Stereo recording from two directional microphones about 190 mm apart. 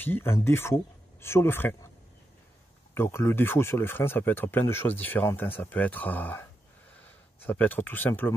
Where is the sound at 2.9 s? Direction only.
15° left (ahead or behind).